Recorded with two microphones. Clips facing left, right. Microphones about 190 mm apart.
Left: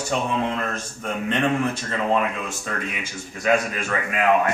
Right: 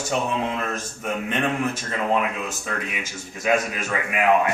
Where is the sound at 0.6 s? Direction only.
5° right (ahead or behind).